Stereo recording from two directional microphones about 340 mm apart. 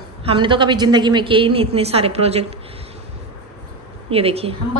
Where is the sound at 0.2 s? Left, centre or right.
Centre.